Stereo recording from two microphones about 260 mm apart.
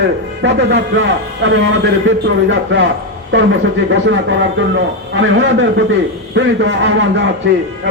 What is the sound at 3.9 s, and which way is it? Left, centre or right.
A man's voice, right.